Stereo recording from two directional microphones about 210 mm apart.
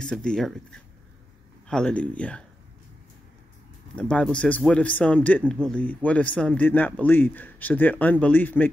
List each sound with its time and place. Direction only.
0.0 s a man's voice: 5° left (ahead or behind)
3.9 s a man's voice: 5° left (ahead or behind)